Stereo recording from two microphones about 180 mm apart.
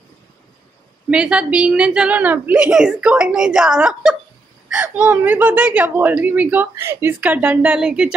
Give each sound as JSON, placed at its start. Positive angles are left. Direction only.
{"t": 1.1, "sound": "a woman's voice", "side_deg": -5}